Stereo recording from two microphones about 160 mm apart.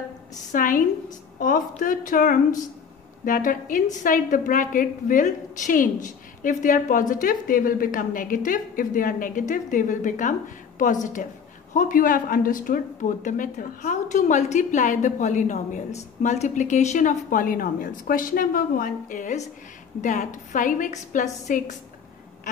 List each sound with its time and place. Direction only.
0.5 s a woman's voice: 55° left (ahead or behind)